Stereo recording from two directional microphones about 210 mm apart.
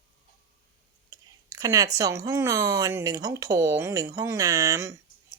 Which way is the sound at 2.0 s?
15° right (ahead or behind).